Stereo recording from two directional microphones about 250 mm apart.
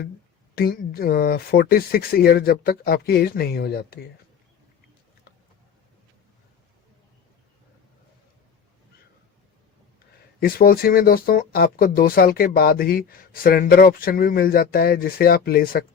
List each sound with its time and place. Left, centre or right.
0.5 s speech: left
10.4 s speech: left